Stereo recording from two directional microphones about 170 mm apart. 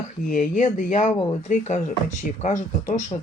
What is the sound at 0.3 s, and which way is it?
Speech, 50° left (ahead or behind).